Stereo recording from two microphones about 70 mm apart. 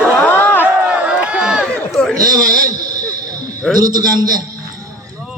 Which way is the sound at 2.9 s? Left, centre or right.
Right.